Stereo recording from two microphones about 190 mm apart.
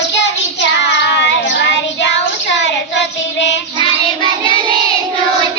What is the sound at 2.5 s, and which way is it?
Child singing, 70° left (ahead or behind).